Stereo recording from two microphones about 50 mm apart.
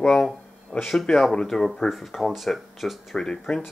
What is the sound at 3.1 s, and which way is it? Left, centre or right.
Speech, centre.